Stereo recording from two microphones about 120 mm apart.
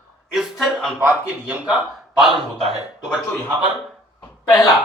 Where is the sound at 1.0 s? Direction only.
15° right (ahead or behind).